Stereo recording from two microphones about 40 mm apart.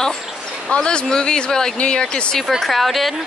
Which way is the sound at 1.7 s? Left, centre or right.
Left.